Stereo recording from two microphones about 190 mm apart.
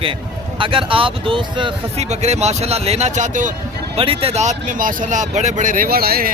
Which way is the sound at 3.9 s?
30° right (ahead or behind).